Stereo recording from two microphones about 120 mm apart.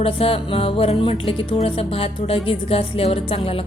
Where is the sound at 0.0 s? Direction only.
55° left (ahead or behind).